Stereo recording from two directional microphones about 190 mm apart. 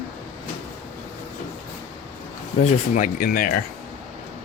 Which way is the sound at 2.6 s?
45° left (ahead or behind).